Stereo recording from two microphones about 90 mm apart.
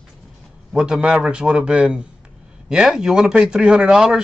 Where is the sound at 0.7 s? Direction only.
5° right (ahead or behind).